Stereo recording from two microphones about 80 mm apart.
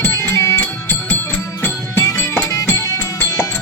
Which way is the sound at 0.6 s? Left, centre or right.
Left.